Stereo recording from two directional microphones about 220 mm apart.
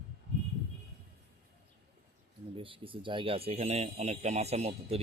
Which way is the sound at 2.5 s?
25° right (ahead or behind).